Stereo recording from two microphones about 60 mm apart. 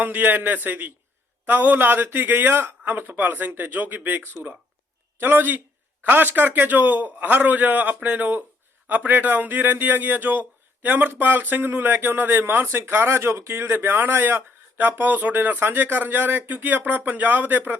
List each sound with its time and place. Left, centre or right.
0.0 s a man's voice: right
5.2 s a man's voice: right